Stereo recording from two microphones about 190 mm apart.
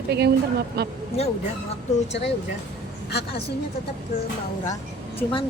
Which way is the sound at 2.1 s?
65° left (ahead or behind).